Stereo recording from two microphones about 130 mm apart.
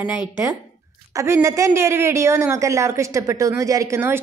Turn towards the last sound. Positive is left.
turn(degrees=-20)  # may be behind; listen again after turning